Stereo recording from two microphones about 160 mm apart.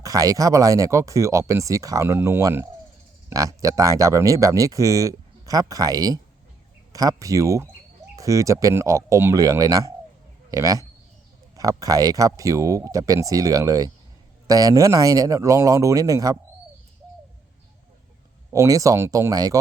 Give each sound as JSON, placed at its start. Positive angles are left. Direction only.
{"t": 0.0, "sound": "speech", "side_deg": -20}
{"t": 18.5, "sound": "speech", "side_deg": -20}